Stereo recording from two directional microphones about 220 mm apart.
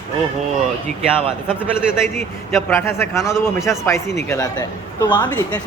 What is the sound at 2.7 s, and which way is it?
Speech, 10° left (ahead or behind).